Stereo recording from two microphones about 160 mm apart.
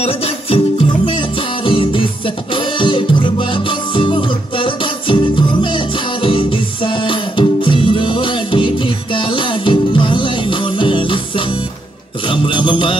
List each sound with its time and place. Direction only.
0.0 s music: 35° left (ahead or behind)